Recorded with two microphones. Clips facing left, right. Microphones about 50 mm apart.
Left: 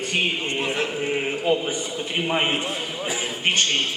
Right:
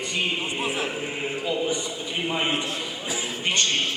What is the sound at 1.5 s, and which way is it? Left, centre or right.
Speech, left.